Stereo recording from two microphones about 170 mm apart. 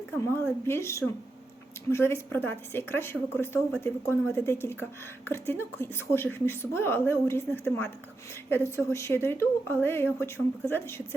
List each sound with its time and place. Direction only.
0.2 s a woman's voice: 15° left (ahead or behind)